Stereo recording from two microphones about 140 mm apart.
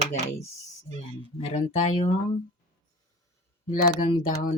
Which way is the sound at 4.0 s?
80° left.